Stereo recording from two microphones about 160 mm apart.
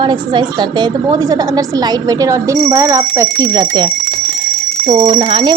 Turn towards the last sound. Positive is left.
turn(degrees=-35)  # may be behind; listen again after turning